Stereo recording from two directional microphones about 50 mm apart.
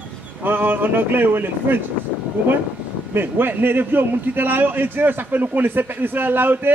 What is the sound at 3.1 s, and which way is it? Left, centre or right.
A man's voice, right.